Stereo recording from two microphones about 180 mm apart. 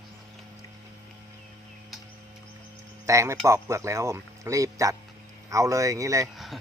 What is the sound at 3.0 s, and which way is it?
Speech, 15° right (ahead or behind).